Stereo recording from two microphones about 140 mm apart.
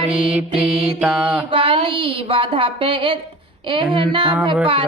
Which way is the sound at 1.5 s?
40° right (ahead or behind).